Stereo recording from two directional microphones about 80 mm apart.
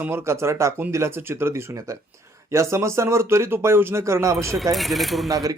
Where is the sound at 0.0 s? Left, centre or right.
Right.